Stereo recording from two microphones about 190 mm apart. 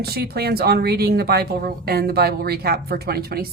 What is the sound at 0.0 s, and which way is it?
A woman's voice, 55° right (ahead or behind).